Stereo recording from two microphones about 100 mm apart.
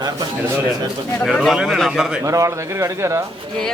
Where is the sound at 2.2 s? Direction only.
30° right (ahead or behind).